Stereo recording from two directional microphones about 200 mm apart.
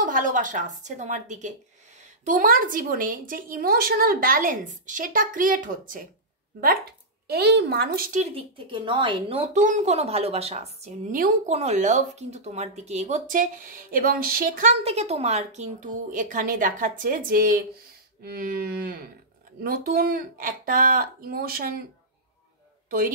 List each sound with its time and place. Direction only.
0.0 s a woman's voice: 40° right (ahead or behind)
7.2 s a woman's voice: 55° right (ahead or behind)
8.2 s a woman's voice: 25° right (ahead or behind); by 21.8 s 50° right (ahead or behind)
22.8 s a woman's voice: 45° right (ahead or behind)